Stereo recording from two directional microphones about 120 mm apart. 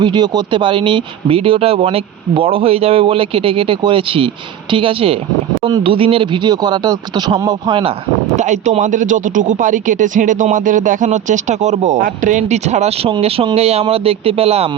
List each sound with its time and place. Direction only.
0.0 s speech: 40° right (ahead or behind)
8.4 s speech: 85° right; by 14.7 s 55° right (ahead or behind)